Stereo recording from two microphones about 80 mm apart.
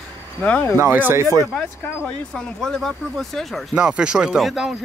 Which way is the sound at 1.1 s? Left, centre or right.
Right.